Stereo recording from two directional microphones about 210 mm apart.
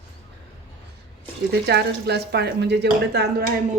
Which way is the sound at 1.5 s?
50° right (ahead or behind).